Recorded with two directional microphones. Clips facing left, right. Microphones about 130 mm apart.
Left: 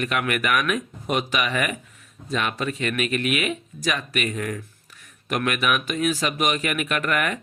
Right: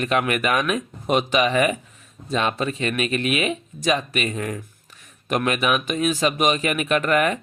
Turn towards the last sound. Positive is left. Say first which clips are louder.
# right 5 dB
turn(degrees=-25)  # may be behind; listen again after turning